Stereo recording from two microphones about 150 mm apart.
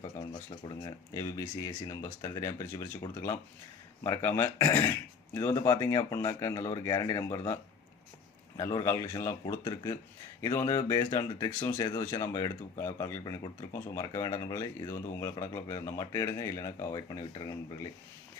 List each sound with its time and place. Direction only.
0.6 s speech: 30° left (ahead or behind)
4.0 s speech: 20° left (ahead or behind)